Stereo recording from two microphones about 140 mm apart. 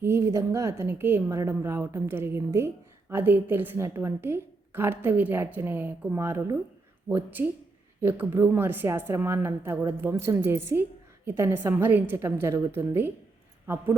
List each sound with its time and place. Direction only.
0.0 s a woman's voice: 20° right (ahead or behind)